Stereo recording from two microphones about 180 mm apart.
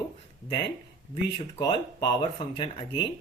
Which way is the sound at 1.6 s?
25° left (ahead or behind).